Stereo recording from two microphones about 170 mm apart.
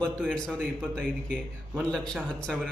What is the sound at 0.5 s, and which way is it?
A man's voice, 10° right (ahead or behind).